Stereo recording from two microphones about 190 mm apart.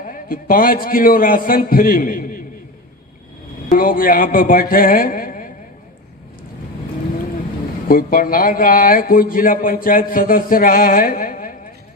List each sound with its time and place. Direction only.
0.0 s a man's voice: 45° left (ahead or behind)
3.7 s a man's voice: 50° left (ahead or behind)
7.9 s a man's voice: 50° left (ahead or behind)